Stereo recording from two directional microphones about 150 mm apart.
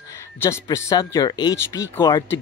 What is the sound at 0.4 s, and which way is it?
Speech, 20° left (ahead or behind).